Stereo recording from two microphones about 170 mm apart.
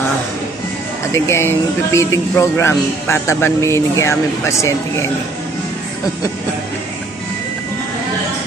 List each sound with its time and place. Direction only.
1.1 s speech: 15° left (ahead or behind)